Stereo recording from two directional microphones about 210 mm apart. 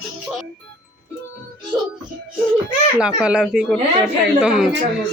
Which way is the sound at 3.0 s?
5° right (ahead or behind).